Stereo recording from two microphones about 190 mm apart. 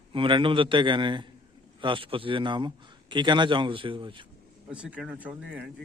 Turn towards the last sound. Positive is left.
turn(degrees=-5)  # may be behind; listen again after turning